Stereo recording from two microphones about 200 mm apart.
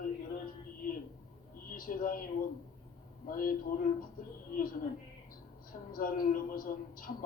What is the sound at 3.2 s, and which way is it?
Speech, 45° left (ahead or behind).